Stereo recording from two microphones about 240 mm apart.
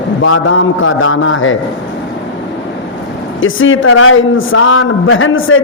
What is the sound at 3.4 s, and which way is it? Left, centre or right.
A man's voice, left.